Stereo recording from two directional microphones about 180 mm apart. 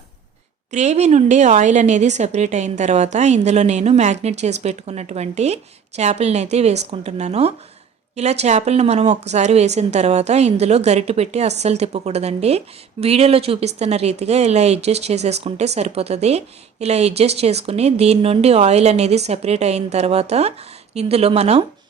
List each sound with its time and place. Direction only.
0.7 s speech: 40° right (ahead or behind)